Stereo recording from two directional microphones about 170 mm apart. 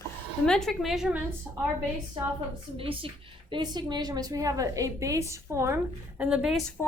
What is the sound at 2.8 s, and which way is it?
A woman's voice, 30° right (ahead or behind).